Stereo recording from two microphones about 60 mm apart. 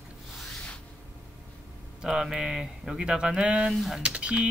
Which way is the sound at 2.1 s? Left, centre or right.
Centre.